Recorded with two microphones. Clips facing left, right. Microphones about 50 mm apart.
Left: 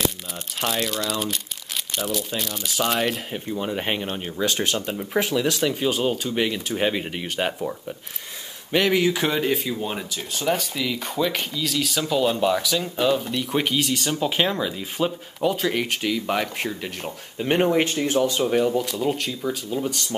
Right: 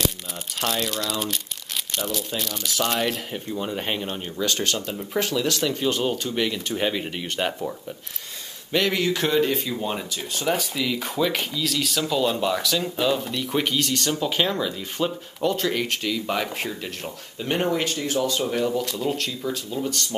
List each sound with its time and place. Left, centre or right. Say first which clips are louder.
0.6 s speech: left 1 dB; centre
8.7 s speech: left 3 dB; centre
18.7 s speech: left 2 dB; centre